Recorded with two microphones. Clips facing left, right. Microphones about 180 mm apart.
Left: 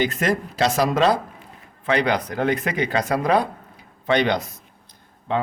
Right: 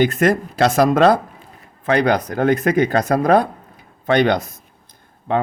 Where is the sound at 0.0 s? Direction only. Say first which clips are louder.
Right 6 dB; 50° right (ahead or behind).